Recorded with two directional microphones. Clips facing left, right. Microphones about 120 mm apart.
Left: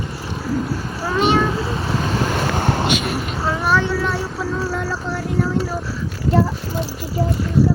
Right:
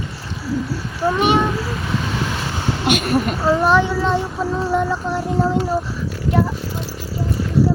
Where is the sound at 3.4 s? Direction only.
20° right (ahead or behind).